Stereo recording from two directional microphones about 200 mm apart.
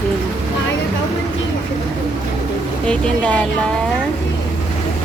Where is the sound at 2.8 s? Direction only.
5° left (ahead or behind).